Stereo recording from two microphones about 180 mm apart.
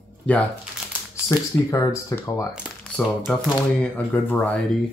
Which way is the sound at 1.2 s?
15° left (ahead or behind).